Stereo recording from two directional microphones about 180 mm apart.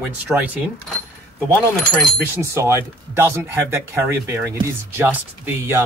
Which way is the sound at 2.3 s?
15° right (ahead or behind).